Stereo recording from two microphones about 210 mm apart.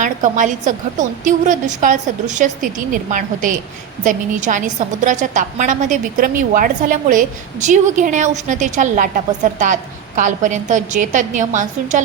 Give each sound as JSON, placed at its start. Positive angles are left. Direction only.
{"t": 0.0, "sound": "a woman's voice", "side_deg": -40}
{"t": 10.2, "sound": "a woman's voice", "side_deg": -35}